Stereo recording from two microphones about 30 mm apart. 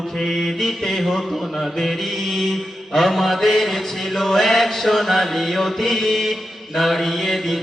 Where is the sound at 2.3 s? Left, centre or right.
Centre.